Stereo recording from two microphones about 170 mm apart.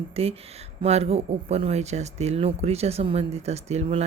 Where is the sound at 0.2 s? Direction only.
35° right (ahead or behind).